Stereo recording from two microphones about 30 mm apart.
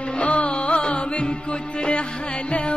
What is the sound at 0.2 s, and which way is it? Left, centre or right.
Music, left.